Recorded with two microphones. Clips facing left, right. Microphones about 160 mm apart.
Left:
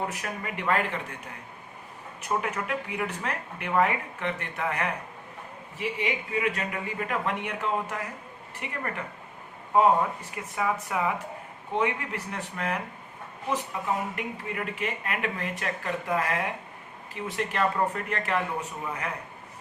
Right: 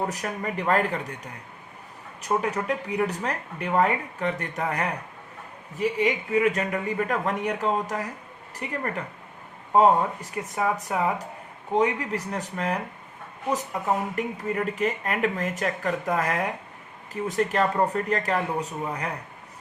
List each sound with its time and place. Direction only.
0.1 s speech: 40° right (ahead or behind)
2.2 s speech: 35° right (ahead or behind)